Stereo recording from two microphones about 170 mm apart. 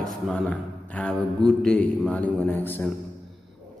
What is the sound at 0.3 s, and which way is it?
A man's voice, 5° left (ahead or behind).